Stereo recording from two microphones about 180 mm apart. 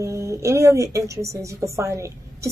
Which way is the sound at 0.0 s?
15° right (ahead or behind).